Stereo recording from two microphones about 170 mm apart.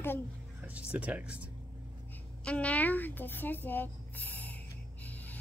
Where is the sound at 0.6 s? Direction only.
10° right (ahead or behind).